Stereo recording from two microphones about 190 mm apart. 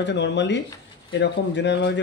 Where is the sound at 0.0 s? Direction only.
65° left (ahead or behind).